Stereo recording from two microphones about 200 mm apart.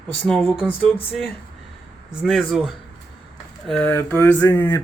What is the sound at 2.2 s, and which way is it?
Speech, centre (ahead or behind).